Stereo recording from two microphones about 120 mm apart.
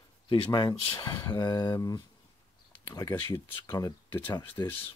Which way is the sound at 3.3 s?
30° left (ahead or behind).